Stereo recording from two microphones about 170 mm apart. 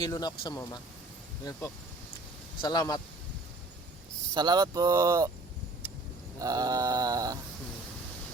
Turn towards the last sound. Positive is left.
turn(degrees=-20)  # may be behind; listen again after turning